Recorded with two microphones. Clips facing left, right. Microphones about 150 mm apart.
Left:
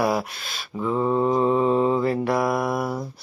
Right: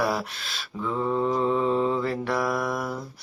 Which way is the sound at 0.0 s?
10° left (ahead or behind).